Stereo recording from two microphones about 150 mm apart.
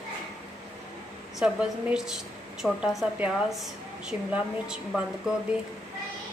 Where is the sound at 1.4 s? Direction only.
5° right (ahead or behind).